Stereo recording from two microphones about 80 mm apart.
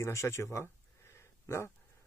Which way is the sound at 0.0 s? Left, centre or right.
Left.